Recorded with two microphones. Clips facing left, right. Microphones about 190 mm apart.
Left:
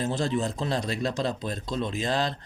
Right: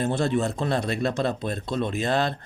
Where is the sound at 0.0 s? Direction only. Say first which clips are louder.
Right 3 dB; 60° right (ahead or behind).